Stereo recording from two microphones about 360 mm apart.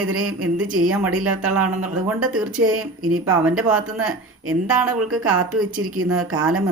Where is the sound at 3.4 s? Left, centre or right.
Centre.